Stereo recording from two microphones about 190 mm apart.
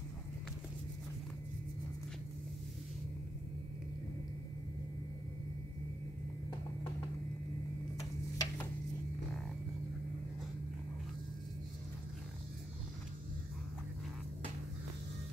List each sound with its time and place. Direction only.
8.0 s tick-tock: 20° left (ahead or behind)